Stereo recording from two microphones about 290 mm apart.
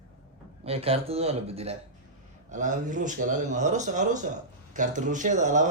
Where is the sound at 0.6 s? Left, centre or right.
Centre.